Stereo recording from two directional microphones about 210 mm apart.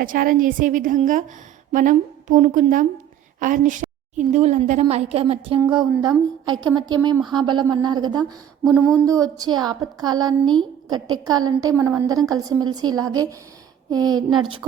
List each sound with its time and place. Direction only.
0.0 s a woman's voice: 40° right (ahead or behind); by 14.4 s 20° right (ahead or behind)